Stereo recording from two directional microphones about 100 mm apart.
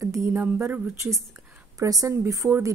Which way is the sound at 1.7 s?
35° right (ahead or behind).